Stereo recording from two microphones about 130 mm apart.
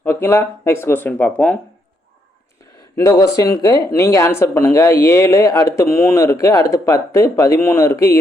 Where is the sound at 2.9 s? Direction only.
20° left (ahead or behind).